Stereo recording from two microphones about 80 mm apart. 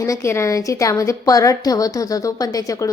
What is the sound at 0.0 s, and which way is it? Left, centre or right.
A woman's voice, left.